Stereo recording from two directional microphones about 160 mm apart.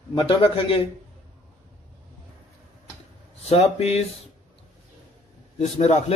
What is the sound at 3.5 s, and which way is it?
Speech, 40° left (ahead or behind).